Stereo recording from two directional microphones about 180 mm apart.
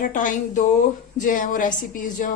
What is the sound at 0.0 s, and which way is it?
A woman's voice, 45° left (ahead or behind).